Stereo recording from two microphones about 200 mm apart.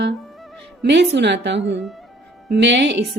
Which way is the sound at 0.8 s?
55° right (ahead or behind).